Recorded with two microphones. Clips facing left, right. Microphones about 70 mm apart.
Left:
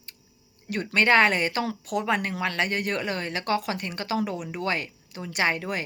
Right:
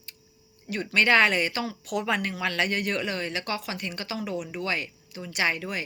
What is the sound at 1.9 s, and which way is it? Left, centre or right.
Speech, left.